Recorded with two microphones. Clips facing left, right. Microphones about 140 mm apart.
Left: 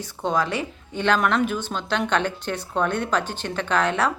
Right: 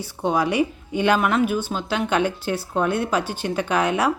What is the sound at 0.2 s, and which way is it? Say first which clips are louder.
A woman's voice: right 4 dB; 10° right (ahead or behind).